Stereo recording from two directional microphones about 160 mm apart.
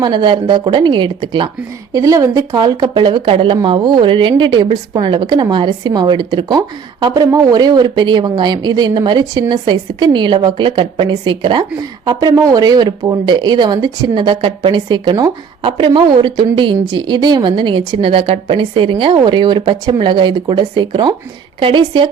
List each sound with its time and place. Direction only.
0.0 s speech: 30° right (ahead or behind)